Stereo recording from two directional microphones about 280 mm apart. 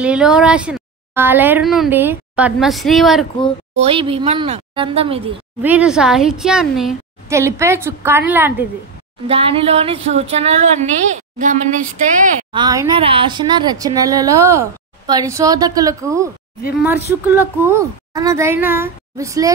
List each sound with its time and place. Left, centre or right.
0.0 s speech: centre
3.7 s a woman's voice: centre
5.6 s a woman's voice: centre
9.3 s a woman's voice: centre
12.5 s a woman's voice: centre